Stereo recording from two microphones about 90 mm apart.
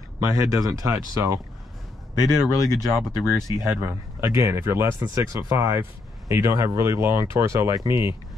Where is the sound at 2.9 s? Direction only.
25° right (ahead or behind).